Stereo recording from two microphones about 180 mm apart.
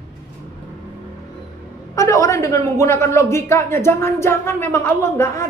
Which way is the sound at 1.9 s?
15° left (ahead or behind).